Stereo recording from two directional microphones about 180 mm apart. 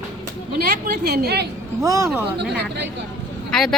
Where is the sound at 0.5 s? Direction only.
60° right (ahead or behind).